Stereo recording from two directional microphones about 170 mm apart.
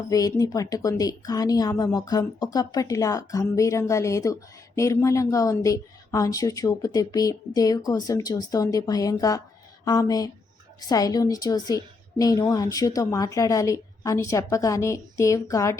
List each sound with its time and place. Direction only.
0.1 s speech: 20° left (ahead or behind)